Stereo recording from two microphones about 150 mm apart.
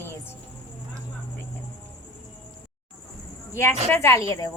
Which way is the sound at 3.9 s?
20° left (ahead or behind).